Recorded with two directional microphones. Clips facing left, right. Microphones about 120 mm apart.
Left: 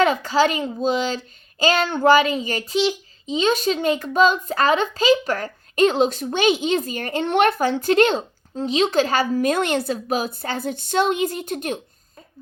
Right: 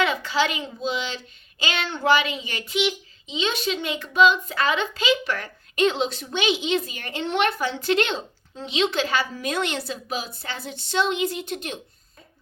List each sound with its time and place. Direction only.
0.0 s a child's voice: 40° left (ahead or behind)